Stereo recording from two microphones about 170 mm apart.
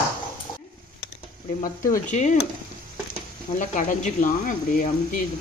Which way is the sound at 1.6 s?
45° left (ahead or behind).